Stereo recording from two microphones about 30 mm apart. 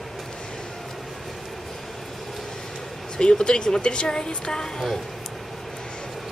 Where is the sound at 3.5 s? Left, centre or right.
Left.